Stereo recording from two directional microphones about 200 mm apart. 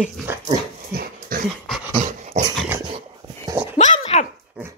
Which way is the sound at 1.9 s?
35° right (ahead or behind).